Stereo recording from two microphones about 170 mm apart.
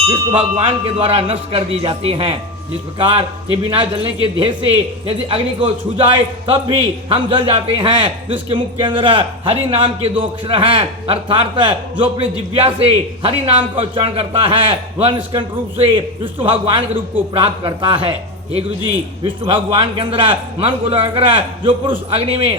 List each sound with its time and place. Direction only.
0.1 s speech: 25° right (ahead or behind)
0.5 s a man's voice: 35° right (ahead or behind)
19.5 s a man's voice: 30° right (ahead or behind)